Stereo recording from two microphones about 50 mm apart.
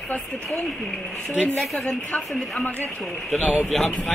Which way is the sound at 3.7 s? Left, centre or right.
Centre.